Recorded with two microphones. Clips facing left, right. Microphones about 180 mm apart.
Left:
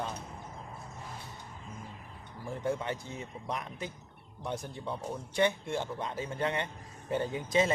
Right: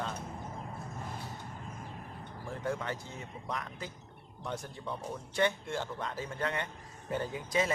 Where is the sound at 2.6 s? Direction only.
20° left (ahead or behind).